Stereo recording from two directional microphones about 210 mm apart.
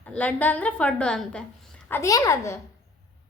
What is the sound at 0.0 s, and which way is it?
Speech, 5° left (ahead or behind).